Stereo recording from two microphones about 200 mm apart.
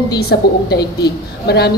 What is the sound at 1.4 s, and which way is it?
Speech, 55° left (ahead or behind).